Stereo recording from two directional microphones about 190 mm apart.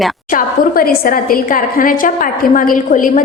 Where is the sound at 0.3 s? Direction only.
50° left (ahead or behind).